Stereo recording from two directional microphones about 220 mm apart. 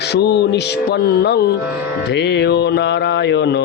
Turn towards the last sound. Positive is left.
turn(degrees=50)  # may be behind; listen again after turning